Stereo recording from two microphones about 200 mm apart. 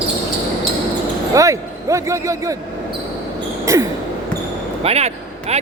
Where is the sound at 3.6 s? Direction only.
15° right (ahead or behind).